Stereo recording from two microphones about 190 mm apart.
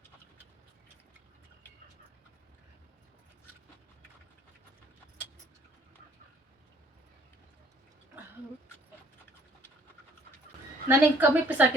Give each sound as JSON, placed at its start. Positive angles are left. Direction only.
{"t": 10.8, "sound": "a woman's voice", "side_deg": -10}